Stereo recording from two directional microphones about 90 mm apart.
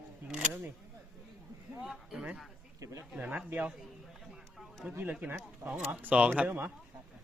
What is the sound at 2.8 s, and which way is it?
Speech, 35° right (ahead or behind).